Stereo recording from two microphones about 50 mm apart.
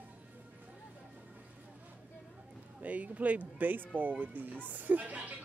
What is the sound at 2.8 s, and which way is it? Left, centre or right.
A woman's voice, right.